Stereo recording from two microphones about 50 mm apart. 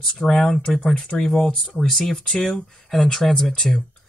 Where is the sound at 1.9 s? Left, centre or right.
Centre.